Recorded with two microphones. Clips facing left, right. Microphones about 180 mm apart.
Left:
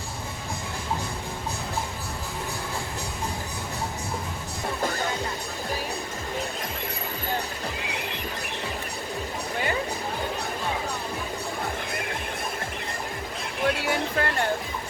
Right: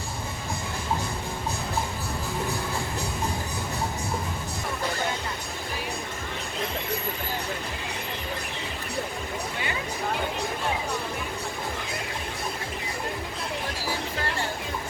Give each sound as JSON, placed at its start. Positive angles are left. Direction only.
{"t": 13.7, "sound": "music", "side_deg": 65}